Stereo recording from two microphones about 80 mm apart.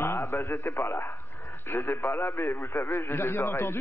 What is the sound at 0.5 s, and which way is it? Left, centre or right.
A man's voice, left.